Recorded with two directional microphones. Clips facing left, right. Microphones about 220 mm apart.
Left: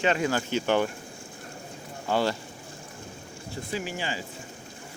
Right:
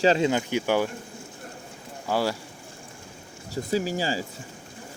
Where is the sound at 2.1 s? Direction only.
5° right (ahead or behind).